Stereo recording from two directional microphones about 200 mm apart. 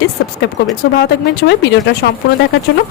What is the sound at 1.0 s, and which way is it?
Speech, 60° left (ahead or behind).